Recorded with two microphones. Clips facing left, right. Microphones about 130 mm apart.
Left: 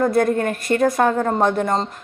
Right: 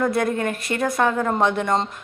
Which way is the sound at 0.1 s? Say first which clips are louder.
Left 4 dB; 45° left (ahead or behind).